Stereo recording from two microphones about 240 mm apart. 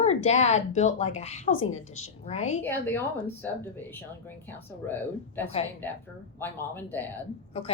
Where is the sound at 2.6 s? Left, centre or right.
Centre.